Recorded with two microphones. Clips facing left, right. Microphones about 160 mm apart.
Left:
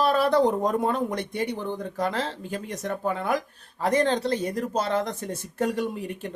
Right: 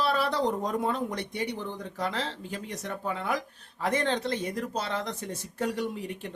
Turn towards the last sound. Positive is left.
turn(degrees=50)  # may be behind; listen again after turning